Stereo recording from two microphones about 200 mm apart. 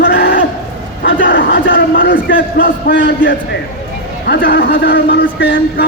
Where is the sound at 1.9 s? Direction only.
60° left (ahead or behind).